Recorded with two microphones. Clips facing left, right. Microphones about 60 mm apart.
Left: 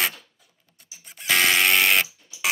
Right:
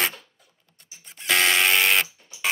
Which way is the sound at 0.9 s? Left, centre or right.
Centre.